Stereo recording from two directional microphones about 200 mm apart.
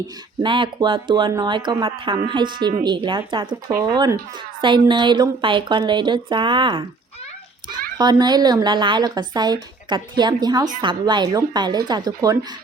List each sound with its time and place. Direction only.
0.4 s speech: 25° right (ahead or behind)
7.9 s speech: 20° right (ahead or behind)